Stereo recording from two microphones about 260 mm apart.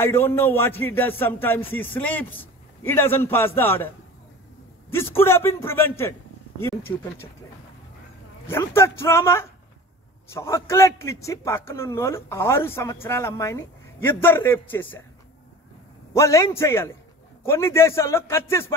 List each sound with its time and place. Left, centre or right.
0.0 s a man's voice: centre
4.9 s a man's voice: centre
8.5 s a man's voice: centre
16.1 s a man's voice: centre